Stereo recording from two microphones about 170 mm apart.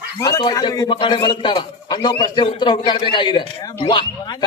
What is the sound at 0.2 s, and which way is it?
A man's voice, 20° left (ahead or behind).